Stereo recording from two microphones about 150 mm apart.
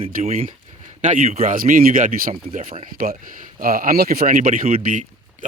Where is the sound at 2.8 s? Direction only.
70° right (ahead or behind).